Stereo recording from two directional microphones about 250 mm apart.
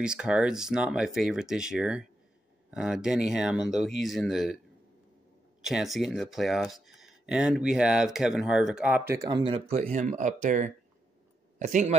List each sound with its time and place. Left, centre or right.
0.0 s speech: centre
5.7 s speech: centre; by 11.9 s right